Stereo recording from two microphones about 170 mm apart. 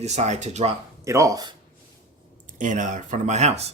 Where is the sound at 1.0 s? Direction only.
20° right (ahead or behind).